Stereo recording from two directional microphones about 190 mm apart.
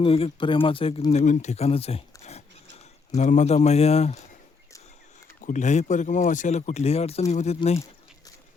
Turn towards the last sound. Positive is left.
turn(degrees=35)  # may be behind; listen again after turning